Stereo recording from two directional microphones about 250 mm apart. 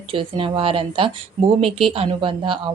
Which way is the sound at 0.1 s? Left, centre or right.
Right.